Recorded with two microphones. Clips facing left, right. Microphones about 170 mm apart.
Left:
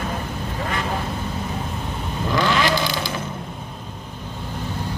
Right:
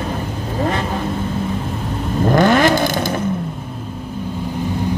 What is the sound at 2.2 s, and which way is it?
Vehicle, 50° right (ahead or behind).